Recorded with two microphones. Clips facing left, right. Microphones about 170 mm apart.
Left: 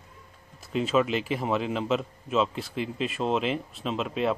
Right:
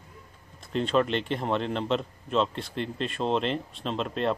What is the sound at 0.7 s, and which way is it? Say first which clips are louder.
A man's voice: even; 5° left (ahead or behind).